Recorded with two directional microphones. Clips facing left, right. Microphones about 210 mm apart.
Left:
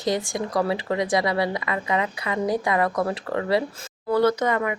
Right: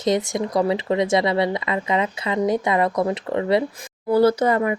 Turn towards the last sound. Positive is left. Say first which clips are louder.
# right 4 dB
turn(degrees=-30)  # may be behind; listen again after turning